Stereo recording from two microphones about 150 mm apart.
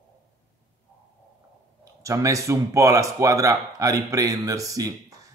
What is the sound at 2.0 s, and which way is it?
A man's voice, 20° right (ahead or behind).